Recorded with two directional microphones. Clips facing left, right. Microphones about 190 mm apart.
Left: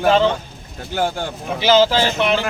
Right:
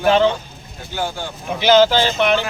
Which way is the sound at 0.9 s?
55° left (ahead or behind).